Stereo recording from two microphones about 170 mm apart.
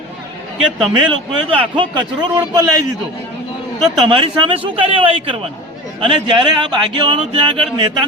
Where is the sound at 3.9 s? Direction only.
30° right (ahead or behind).